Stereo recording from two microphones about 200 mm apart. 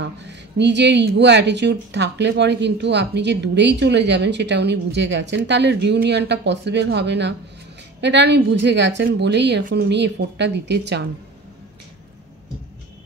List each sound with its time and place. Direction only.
0.0 s speech: 60° right (ahead or behind)